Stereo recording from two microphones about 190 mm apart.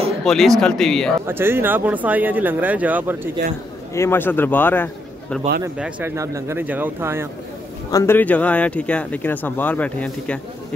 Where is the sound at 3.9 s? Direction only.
15° left (ahead or behind).